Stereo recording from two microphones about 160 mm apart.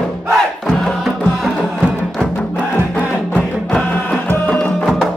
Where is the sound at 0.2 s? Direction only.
Centre (ahead or behind).